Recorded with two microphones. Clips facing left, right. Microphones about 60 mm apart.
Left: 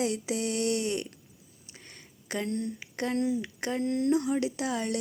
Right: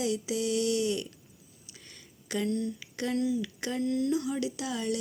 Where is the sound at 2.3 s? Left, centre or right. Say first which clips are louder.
Right 1 dB; left.